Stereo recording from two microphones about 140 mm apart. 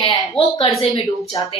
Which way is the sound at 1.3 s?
30° left (ahead or behind).